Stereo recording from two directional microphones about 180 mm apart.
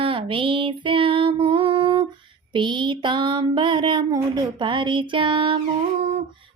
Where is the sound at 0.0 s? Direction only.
30° right (ahead or behind).